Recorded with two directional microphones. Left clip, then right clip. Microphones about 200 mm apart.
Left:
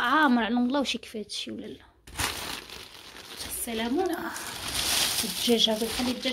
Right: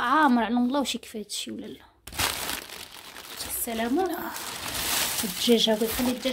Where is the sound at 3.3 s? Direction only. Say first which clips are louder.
Right 2 dB; 30° right (ahead or behind).